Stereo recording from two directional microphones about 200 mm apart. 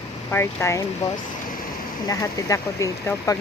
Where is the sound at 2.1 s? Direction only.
15° left (ahead or behind).